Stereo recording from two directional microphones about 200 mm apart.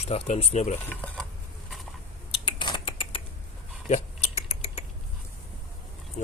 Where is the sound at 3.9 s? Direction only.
30° left (ahead or behind).